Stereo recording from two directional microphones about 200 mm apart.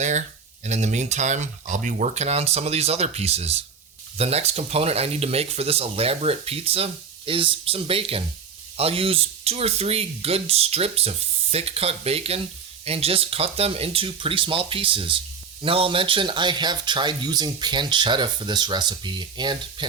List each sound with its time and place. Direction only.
0.6 s speech: 35° right (ahead or behind)